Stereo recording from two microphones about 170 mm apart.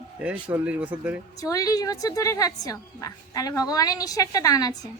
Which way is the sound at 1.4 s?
20° left (ahead or behind).